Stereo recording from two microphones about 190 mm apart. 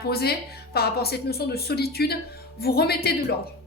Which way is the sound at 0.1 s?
55° left (ahead or behind).